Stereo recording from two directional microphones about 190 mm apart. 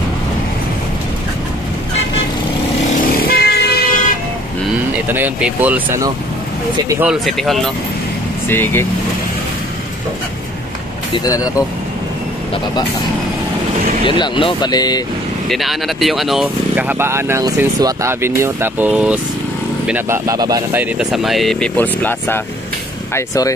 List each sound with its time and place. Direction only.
3.3 s vehicle: 55° left (ahead or behind)
5.0 s speech: 10° right (ahead or behind); by 8.8 s 10° left (ahead or behind)
11.2 s speech: 20° left (ahead or behind)
14.0 s speech: 25° left (ahead or behind)
15.4 s speech: centre (ahead or behind); by 23.5 s 20° left (ahead or behind)